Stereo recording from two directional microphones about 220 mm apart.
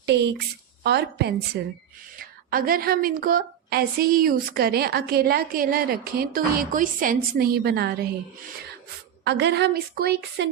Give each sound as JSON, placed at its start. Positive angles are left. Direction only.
{"t": 0.0, "sound": "a woman's voice", "side_deg": -50}
{"t": 9.2, "sound": "a woman's voice", "side_deg": -50}